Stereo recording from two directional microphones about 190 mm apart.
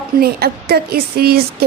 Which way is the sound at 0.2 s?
55° right (ahead or behind).